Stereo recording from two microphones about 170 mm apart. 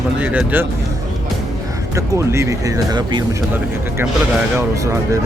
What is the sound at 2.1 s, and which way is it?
Speech, 15° right (ahead or behind).